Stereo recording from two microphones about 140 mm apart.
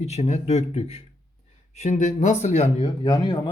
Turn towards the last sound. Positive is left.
turn(degrees=30)  # may be behind; listen again after turning